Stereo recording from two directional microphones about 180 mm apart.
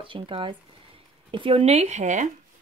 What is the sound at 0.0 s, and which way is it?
Speech, 30° right (ahead or behind).